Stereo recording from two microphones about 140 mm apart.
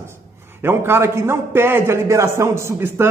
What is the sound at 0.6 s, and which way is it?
A man's voice, 15° right (ahead or behind).